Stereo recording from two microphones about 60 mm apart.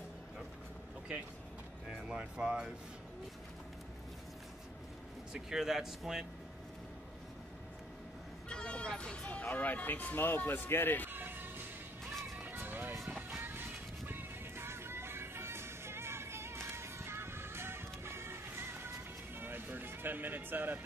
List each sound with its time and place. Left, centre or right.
1.9 s speech: centre
5.3 s speech: centre
8.5 s speech: centre; by 11.1 s left
11.1 s music: right
12.1 s music: centre
12.4 s music: right